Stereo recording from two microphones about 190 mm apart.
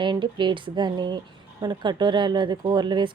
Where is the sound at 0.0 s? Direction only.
25° right (ahead or behind).